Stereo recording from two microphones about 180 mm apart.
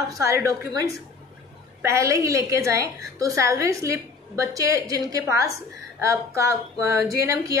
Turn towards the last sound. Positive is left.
turn(degrees=-15)  # may be behind; listen again after turning